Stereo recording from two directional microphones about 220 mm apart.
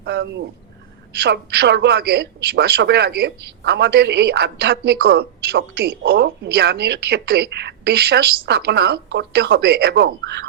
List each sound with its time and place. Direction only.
0.0 s a woman's voice: 50° right (ahead or behind)